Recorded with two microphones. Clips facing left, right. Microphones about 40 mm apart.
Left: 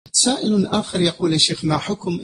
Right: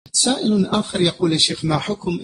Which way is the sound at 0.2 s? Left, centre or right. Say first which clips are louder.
Even; centre.